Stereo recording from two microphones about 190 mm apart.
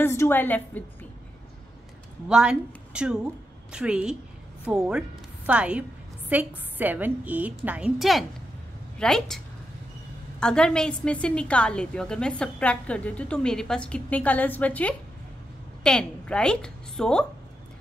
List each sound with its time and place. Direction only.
0.0 s a woman's voice: 15° left (ahead or behind)
2.2 s a woman's voice: 5° right (ahead or behind)
10.4 s a woman's voice: 5° left (ahead or behind)